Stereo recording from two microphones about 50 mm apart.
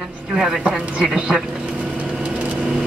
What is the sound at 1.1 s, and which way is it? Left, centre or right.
Speech, centre.